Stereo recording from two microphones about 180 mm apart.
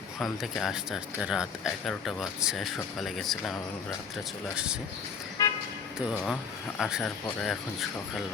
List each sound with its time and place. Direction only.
0.2 s speech: centre (ahead or behind)
5.4 s toot: 20° left (ahead or behind)
6.1 s speech: centre (ahead or behind)